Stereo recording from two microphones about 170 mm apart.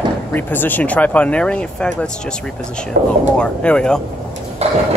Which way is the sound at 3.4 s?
5° left (ahead or behind).